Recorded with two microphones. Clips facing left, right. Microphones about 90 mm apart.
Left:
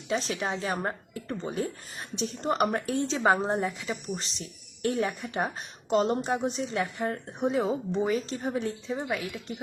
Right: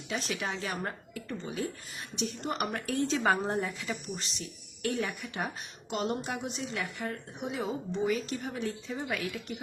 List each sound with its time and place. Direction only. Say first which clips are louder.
0.1 s speech: left 5 dB; 30° left (ahead or behind)